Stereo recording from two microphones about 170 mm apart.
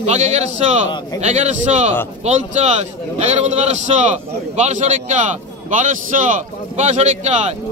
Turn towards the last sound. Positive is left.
turn(degrees=-40)  # may be behind; listen again after turning